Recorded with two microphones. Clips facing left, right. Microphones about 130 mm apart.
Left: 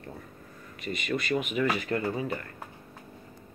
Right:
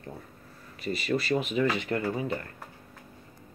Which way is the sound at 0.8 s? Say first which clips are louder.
Right 3 dB; 35° right (ahead or behind).